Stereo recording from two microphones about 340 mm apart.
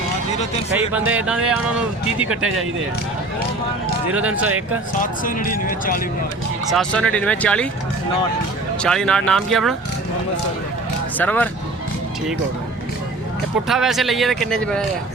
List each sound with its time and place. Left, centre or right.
0.9 s speech: centre
4.1 s speech: centre
5.2 s speech: left
6.7 s speech: centre
8.8 s speech: centre
11.2 s speech: centre
13.7 s speech: centre